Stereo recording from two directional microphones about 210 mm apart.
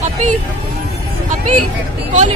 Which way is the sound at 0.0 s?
35° right (ahead or behind).